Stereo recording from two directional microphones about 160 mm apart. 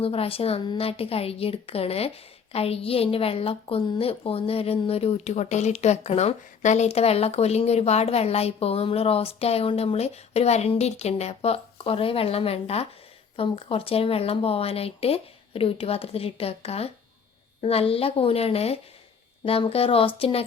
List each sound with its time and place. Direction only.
0.0 s a woman's voice: 35° left (ahead or behind)